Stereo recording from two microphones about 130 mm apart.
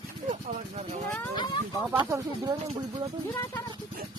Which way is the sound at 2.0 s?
25° right (ahead or behind).